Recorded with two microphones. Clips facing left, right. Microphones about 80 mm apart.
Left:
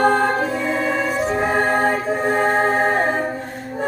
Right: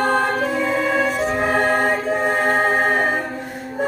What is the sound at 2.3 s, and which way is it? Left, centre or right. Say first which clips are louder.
Music: left 3 dB; centre.